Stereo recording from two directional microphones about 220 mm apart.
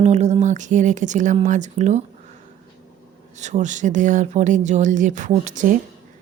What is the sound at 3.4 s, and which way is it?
Speech, 30° right (ahead or behind).